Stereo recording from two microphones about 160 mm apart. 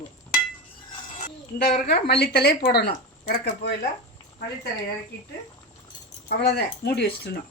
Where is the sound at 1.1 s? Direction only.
70° left (ahead or behind).